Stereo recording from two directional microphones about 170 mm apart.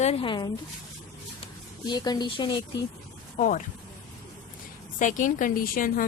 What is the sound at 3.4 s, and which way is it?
Speech, 50° left (ahead or behind).